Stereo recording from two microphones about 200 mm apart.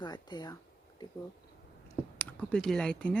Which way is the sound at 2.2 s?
5° left (ahead or behind).